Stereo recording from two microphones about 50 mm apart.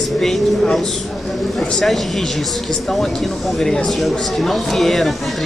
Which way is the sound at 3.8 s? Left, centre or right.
Centre.